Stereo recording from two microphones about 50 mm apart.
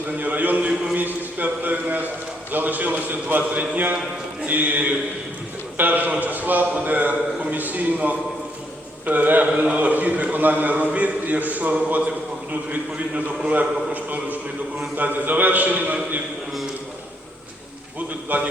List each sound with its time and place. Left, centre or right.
0.2 s a man's voice: right
18.3 s a man's voice: right